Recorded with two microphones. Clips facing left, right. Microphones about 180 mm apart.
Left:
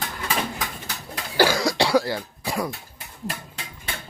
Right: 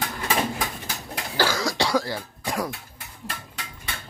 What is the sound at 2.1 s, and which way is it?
Cough, centre (ahead or behind).